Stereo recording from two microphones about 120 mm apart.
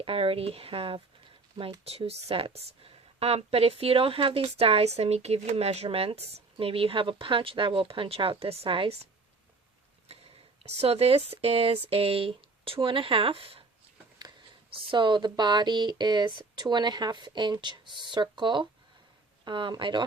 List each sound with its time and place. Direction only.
0.0 s speech: 50° right (ahead or behind)
10.1 s speech: 55° right (ahead or behind)
14.7 s speech: 45° right (ahead or behind)